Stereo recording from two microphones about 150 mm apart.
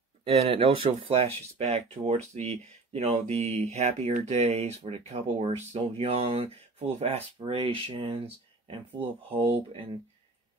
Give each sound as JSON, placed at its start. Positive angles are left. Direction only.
{"t": 0.2, "sound": "speech", "side_deg": -40}